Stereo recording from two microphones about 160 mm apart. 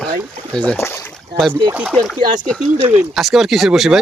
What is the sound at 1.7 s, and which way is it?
Speech, 10° right (ahead or behind).